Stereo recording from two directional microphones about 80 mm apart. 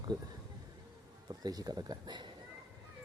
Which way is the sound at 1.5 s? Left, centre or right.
Right.